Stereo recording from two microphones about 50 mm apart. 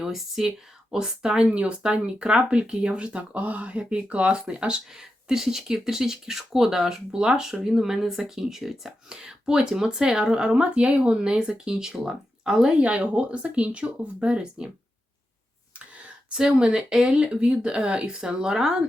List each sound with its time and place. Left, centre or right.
0.0 s speech: centre
12.8 s speech: right
16.3 s speech: centre